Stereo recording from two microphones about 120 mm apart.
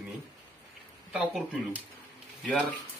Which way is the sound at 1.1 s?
10° right (ahead or behind).